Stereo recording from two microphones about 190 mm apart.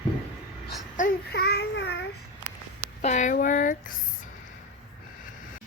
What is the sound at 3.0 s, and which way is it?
Speech, 40° left (ahead or behind).